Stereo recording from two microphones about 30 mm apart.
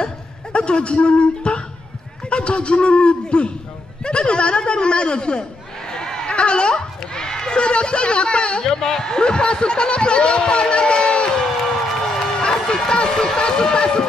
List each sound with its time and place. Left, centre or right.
0.5 s speech: left
5.9 s a sound: left
6.3 s speech: left
8.6 s speech: centre
9.1 s speech: left
12.4 s run: left
13.1 s speech: centre